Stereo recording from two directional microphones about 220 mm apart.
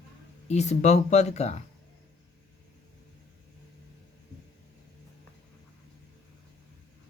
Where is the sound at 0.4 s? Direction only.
30° left (ahead or behind).